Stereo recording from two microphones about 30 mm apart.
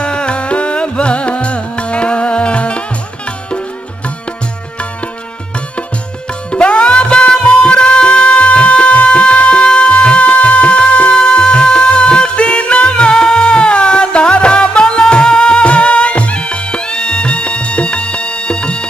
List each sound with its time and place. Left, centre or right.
0.0 s music: left
6.5 s music: left
8.5 s music: left
11.8 s music: left
15.6 s music: left